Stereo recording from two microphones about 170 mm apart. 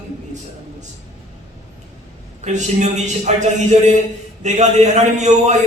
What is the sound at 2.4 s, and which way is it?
A man's voice, 45° right (ahead or behind).